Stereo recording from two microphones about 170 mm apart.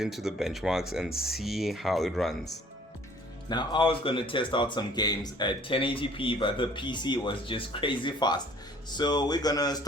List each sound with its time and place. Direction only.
0.0 s speech: centre (ahead or behind)
3.5 s speech: 25° left (ahead or behind)